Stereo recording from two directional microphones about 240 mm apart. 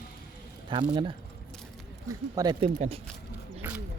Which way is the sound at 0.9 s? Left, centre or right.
Centre.